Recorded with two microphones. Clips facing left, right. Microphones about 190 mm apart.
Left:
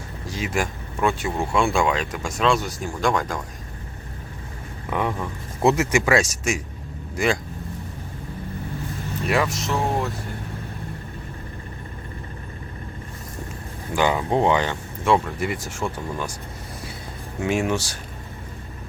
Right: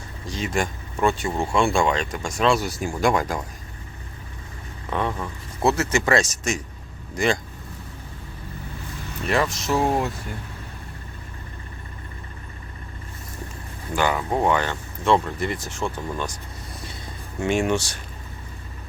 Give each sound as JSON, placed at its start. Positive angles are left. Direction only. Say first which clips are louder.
{"t": 0.3, "sound": "speech", "louder": "even", "side_deg": 5}
{"t": 4.9, "sound": "speech", "louder": "left 1 dB", "side_deg": 10}
{"t": 9.2, "sound": "speech", "louder": "even", "side_deg": 5}
{"t": 13.9, "sound": "speech", "louder": "left 2 dB", "side_deg": 15}
{"t": 17.4, "sound": "speech", "louder": "right 1 dB", "side_deg": 5}